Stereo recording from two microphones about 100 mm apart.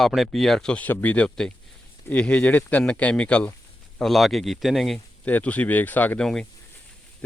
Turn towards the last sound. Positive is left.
turn(degrees=5)  # may be behind; listen again after turning